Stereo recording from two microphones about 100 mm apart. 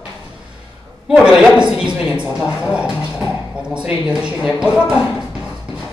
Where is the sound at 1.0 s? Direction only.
5° right (ahead or behind).